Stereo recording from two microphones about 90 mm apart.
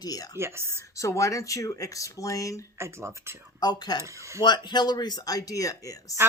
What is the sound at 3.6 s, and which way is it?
Speech, 50° left (ahead or behind).